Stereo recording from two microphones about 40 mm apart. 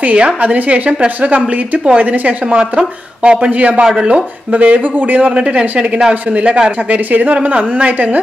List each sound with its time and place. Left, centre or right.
0.0 s a woman's voice: right
2.5 s a man's voice: right
3.5 s a woman's voice: right
3.8 s speech: right
4.5 s a woman's voice: right
5.2 s a woman's voice: right